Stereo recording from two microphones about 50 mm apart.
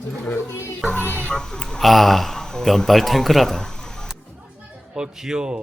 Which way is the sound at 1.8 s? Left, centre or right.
Centre.